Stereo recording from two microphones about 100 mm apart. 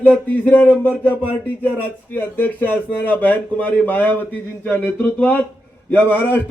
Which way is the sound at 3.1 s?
20° left (ahead or behind).